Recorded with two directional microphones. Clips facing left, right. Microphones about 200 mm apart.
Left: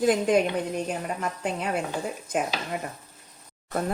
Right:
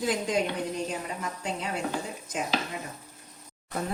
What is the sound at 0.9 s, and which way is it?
Speech, 55° left (ahead or behind).